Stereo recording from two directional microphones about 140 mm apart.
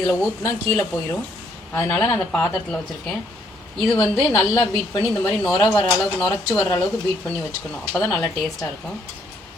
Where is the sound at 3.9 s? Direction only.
20° left (ahead or behind).